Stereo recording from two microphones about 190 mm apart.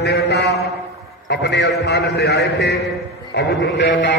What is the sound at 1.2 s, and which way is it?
A man's voice, 60° left (ahead or behind).